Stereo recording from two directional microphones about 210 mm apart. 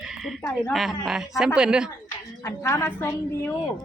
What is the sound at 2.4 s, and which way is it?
Speech, 15° left (ahead or behind).